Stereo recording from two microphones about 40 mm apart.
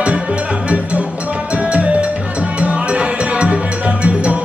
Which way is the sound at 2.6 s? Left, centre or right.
Right.